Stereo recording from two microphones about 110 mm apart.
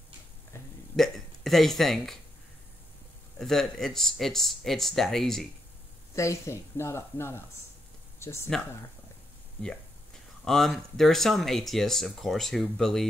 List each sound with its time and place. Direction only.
0.9 s speech: centre (ahead or behind)
3.3 s speech: 5° left (ahead or behind)
6.1 s speech: 25° left (ahead or behind)
10.4 s speech: 5° left (ahead or behind)